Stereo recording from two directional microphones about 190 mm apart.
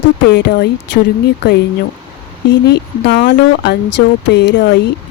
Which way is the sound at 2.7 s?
65° left (ahead or behind).